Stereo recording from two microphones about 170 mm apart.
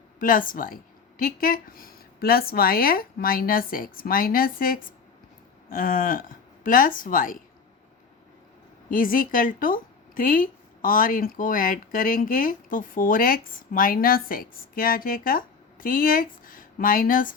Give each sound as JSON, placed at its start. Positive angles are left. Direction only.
{"t": 0.2, "sound": "a woman's voice", "side_deg": 55}
{"t": 8.9, "sound": "a woman's voice", "side_deg": 55}